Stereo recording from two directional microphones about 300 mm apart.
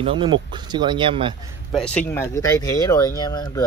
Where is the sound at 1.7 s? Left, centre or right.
Centre.